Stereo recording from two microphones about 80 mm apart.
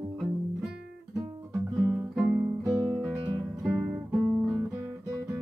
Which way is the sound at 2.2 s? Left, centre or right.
Right.